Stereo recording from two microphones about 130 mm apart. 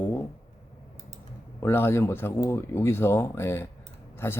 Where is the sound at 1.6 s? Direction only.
20° left (ahead or behind).